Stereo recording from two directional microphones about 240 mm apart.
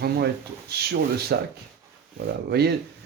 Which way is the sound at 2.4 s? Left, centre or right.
Right.